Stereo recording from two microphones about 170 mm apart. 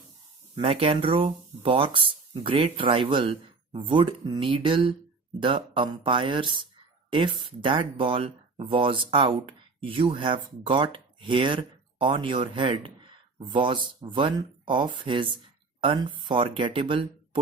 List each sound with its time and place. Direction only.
0.5 s speech: 35° right (ahead or behind)